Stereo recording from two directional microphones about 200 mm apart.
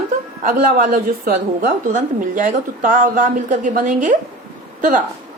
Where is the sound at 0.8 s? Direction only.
45° right (ahead or behind).